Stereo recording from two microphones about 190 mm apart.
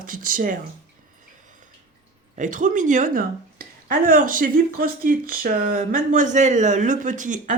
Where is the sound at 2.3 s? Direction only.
40° right (ahead or behind).